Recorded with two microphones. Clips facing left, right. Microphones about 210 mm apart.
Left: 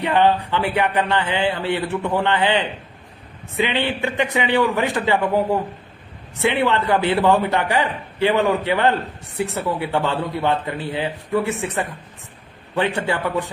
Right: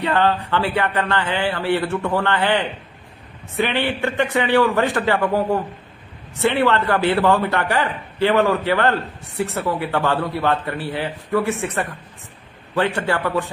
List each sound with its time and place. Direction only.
0.0 s a man's voice: 15° left (ahead or behind)
6.4 s a man's voice: 20° left (ahead or behind)